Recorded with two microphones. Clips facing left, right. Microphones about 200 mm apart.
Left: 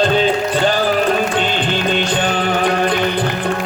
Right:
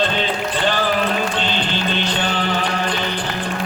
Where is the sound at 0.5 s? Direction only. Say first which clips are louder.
Left 4 dB; 45° left (ahead or behind).